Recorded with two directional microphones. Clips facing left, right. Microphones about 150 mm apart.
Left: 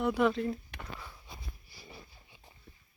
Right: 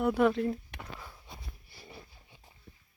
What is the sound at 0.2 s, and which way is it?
Speech, 5° right (ahead or behind).